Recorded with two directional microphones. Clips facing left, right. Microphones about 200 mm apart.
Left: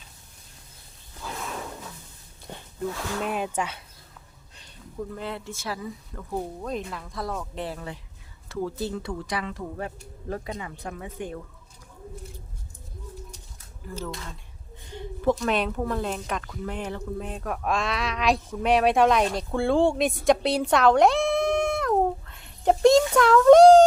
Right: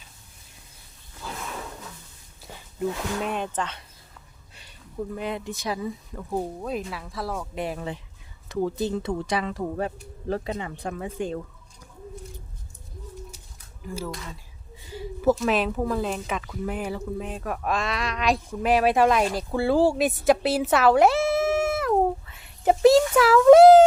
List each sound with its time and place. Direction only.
2.7 s speech: centre (ahead or behind)
5.1 s speech: 15° right (ahead or behind)
6.6 s speech: 5° right (ahead or behind); by 11.3 s 30° right (ahead or behind)
13.8 s speech: 10° right (ahead or behind)